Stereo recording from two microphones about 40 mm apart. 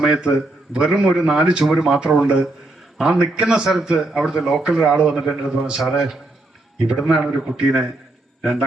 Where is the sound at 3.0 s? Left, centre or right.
Centre.